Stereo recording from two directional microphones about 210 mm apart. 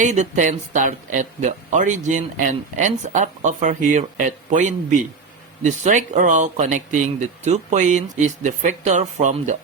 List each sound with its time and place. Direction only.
0.0 s speech: 35° right (ahead or behind)